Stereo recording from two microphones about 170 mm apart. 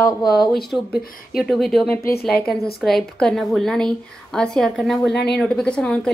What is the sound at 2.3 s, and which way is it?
A woman's voice, centre (ahead or behind).